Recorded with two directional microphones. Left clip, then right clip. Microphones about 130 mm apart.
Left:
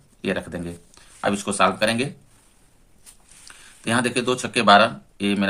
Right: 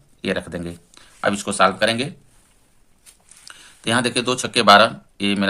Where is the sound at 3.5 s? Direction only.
35° right (ahead or behind).